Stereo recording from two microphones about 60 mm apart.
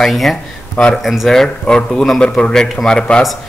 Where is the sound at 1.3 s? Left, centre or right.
Centre.